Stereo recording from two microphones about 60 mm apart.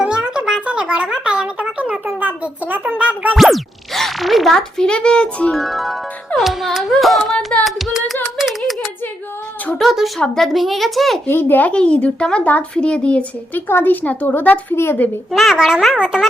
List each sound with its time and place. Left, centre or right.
0.0 s a sound: centre
2.1 s a child's voice: right
3.3 s speech: centre
4.5 s a child's voice: centre
5.5 s speech: centre
7.6 s music: centre
9.7 s speech: centre
11.3 s speech: left
11.7 s speech: centre
13.6 s speech: left
15.3 s speech: centre
15.5 s speech: centre